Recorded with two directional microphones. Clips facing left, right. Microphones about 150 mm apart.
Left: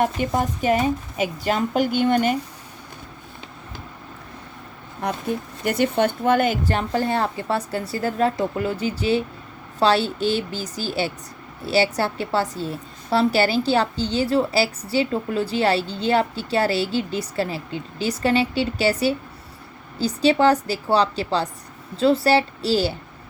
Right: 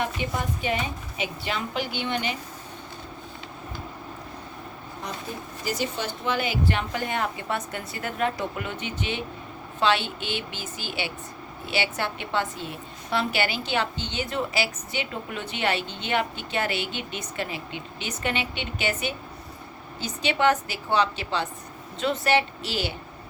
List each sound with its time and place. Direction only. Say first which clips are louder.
0.0 s a woman's voice: left 7 dB; 45° left (ahead or behind)
5.0 s a woman's voice: left 10 dB; 65° left (ahead or behind); by 23.0 s 35° left (ahead or behind)